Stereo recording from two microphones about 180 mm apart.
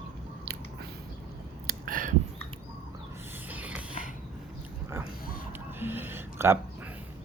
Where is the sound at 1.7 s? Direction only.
50° right (ahead or behind).